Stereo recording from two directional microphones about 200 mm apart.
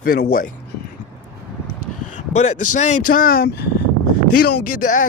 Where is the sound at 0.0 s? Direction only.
50° left (ahead or behind).